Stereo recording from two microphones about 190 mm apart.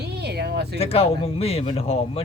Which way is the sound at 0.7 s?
30° left (ahead or behind).